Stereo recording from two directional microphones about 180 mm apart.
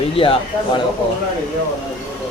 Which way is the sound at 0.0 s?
30° left (ahead or behind).